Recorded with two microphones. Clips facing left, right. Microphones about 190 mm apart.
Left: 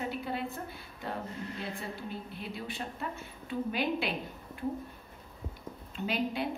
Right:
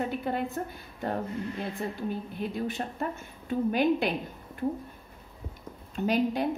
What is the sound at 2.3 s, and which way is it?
Speech, 45° right (ahead or behind).